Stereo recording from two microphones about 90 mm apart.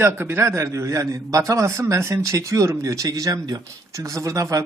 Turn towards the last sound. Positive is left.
turn(degrees=-40)  # may be behind; listen again after turning